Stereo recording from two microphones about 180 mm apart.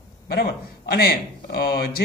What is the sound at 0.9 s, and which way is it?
A man's voice, 60° left (ahead or behind).